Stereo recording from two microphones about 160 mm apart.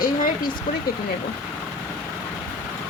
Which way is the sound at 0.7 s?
60° left (ahead or behind).